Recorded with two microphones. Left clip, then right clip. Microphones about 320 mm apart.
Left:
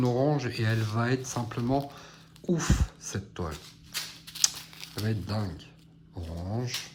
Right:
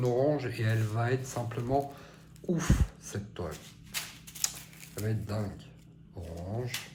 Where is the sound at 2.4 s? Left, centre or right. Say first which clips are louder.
Left 3 dB; left.